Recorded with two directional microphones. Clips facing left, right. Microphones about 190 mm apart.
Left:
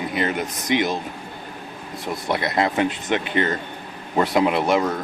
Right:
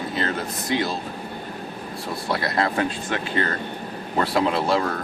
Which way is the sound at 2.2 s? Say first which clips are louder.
Left 2 dB; 20° left (ahead or behind).